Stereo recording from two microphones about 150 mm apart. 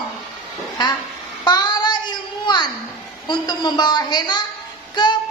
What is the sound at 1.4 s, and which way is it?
Child singing, 30° left (ahead or behind).